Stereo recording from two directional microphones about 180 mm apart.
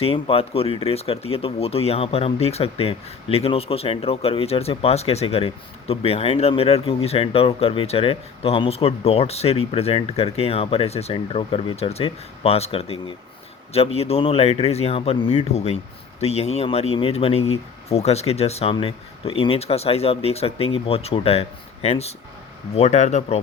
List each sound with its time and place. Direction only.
0.0 s speech: 30° left (ahead or behind)